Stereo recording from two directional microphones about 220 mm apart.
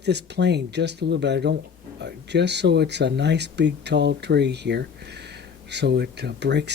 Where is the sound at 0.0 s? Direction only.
50° right (ahead or behind).